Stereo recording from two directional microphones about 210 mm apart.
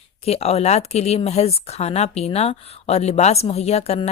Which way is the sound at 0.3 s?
30° left (ahead or behind).